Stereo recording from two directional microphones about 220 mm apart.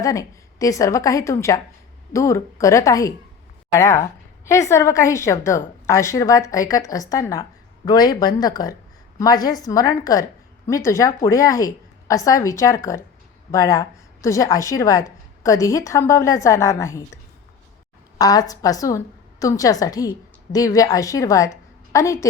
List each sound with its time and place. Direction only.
0.0 s a woman's voice: 15° left (ahead or behind)
18.2 s a woman's voice: 15° left (ahead or behind)